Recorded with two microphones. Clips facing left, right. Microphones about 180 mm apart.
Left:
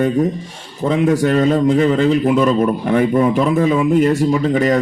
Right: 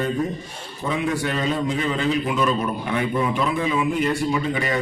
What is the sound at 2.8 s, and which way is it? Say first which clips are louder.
A man's voice: left 9 dB; 45° left (ahead or behind).